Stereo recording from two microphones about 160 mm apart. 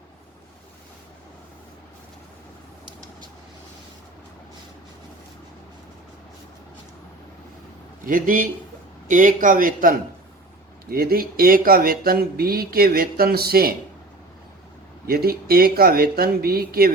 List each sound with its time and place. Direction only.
8.0 s a man's voice: 60° right (ahead or behind)
15.0 s speech: 70° right (ahead or behind)